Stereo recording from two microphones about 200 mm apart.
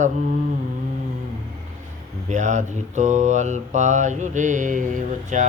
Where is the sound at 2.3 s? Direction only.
35° right (ahead or behind).